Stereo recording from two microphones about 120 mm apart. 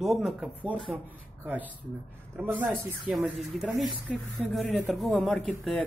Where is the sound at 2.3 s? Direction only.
20° right (ahead or behind).